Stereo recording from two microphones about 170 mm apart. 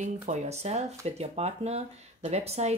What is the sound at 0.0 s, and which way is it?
Speech, 45° right (ahead or behind).